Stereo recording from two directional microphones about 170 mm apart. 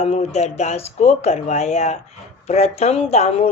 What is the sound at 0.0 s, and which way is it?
Speech, 40° left (ahead or behind).